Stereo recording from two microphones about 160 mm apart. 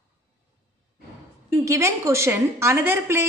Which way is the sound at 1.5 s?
20° right (ahead or behind).